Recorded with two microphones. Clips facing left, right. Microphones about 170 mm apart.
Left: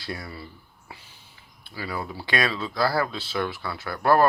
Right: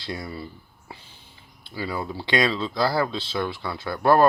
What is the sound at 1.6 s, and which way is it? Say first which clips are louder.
Speech: right 3 dB; 25° right (ahead or behind).